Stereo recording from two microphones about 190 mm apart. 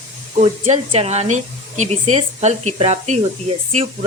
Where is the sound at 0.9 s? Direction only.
35° right (ahead or behind).